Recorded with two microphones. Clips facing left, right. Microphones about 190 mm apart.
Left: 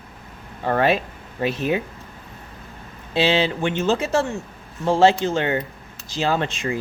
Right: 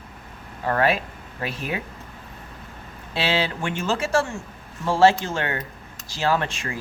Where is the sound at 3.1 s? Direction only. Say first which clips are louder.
Left 5 dB; 20° left (ahead or behind).